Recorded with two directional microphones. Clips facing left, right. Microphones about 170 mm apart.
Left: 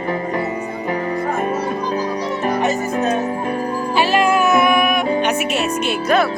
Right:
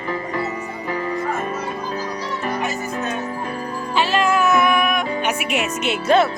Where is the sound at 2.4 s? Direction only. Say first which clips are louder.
Left 6 dB; 35° left (ahead or behind).